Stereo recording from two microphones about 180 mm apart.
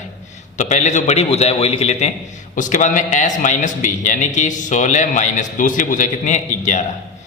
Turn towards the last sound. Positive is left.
turn(degrees=40)  # may be behind; listen again after turning